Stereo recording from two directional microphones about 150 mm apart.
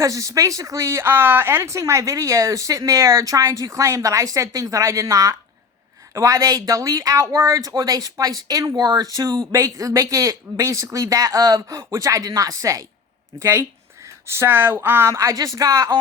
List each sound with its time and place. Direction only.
0.0 s speech: 20° right (ahead or behind)